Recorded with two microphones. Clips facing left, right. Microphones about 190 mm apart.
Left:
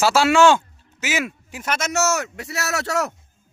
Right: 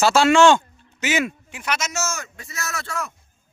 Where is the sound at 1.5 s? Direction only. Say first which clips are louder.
Left 3 dB; 45° left (ahead or behind); by 3.1 s 75° left (ahead or behind).